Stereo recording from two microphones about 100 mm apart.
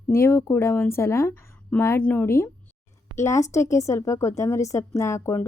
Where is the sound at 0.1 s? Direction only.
30° left (ahead or behind).